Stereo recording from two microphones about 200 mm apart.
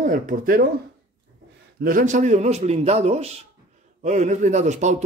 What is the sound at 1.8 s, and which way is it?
A man's voice, 45° right (ahead or behind).